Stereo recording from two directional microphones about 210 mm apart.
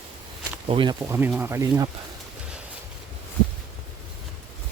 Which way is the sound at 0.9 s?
10° right (ahead or behind).